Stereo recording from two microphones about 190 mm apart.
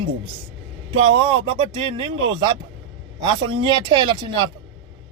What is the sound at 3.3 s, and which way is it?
Speech, 25° right (ahead or behind).